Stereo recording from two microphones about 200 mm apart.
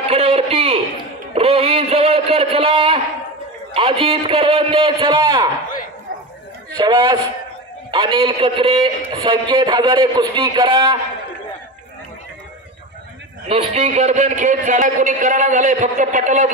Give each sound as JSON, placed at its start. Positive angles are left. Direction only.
{"t": 0.1, "sound": "a sound", "side_deg": -30}
{"t": 3.7, "sound": "a man's voice", "side_deg": -25}
{"t": 6.8, "sound": "a man's voice", "side_deg": -20}
{"t": 13.5, "sound": "a man's voice", "side_deg": -30}